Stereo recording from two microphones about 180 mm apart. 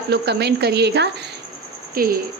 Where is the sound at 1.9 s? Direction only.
55° right (ahead or behind).